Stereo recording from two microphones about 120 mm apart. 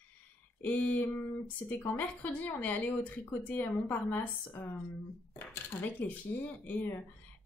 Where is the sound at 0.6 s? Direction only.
15° left (ahead or behind).